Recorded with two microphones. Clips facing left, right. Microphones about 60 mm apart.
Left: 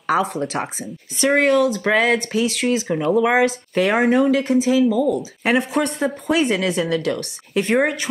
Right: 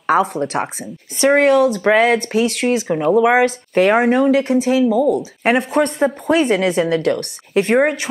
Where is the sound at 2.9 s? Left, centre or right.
Right.